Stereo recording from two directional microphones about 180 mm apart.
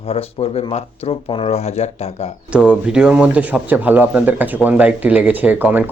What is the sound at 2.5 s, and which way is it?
Speech, 5° right (ahead or behind).